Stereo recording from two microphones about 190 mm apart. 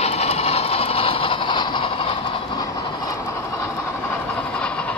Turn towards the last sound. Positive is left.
turn(degrees=5)  # may be behind; listen again after turning